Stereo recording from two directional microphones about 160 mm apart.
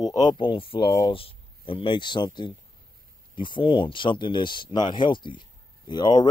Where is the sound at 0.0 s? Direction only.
25° left (ahead or behind).